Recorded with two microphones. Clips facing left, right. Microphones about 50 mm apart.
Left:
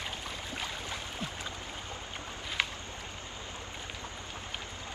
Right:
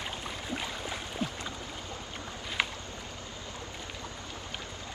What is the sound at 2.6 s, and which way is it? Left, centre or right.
Boat, centre.